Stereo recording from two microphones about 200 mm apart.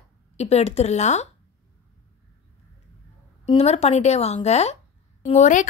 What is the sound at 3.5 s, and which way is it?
A woman's voice, 30° left (ahead or behind).